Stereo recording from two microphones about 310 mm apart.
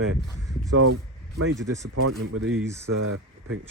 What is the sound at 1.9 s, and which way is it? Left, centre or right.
Speech, right.